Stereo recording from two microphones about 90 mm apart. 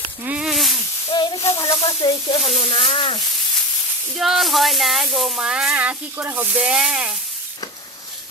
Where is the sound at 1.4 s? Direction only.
35° left (ahead or behind).